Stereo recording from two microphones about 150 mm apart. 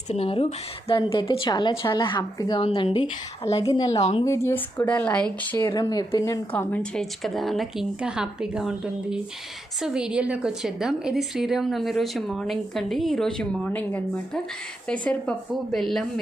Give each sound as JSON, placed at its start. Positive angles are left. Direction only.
{"t": 0.1, "sound": "speech", "side_deg": 40}
{"t": 2.6, "sound": "speech", "side_deg": 40}
{"t": 3.6, "sound": "speech", "side_deg": 25}
{"t": 5.5, "sound": "speech", "side_deg": 25}
{"t": 6.5, "sound": "a woman's voice", "side_deg": 10}